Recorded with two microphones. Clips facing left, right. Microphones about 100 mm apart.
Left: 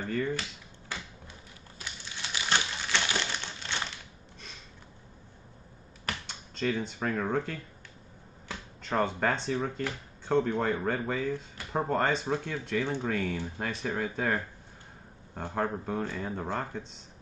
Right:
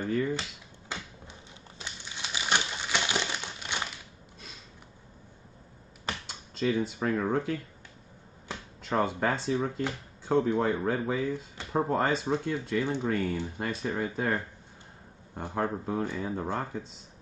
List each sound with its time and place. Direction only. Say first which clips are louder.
0.0 s speech: right 2 dB; 15° right (ahead or behind)
0.4 s finger snapping: even; 25° right (ahead or behind)
1.8 s crumpling: right 1 dB; 15° right (ahead or behind)
6.2 s speech: right 3 dB; 5° right (ahead or behind)
8.8 s speech: right 1 dB; 5° right (ahead or behind)